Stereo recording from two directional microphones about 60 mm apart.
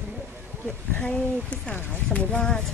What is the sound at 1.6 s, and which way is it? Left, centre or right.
Speech, left.